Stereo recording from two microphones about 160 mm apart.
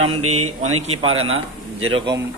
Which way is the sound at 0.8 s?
40° right (ahead or behind).